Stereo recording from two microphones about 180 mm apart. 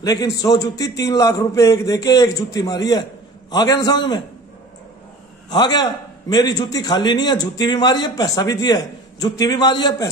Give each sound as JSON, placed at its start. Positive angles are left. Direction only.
{"t": 0.0, "sound": "a man's voice", "side_deg": 20}
{"t": 5.5, "sound": "a man's voice", "side_deg": 25}